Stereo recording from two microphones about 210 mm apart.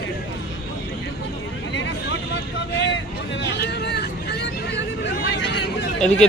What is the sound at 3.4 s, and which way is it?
Vehicle, 50° left (ahead or behind).